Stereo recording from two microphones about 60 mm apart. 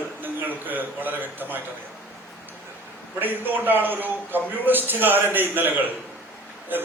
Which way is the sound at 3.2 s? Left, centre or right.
Right.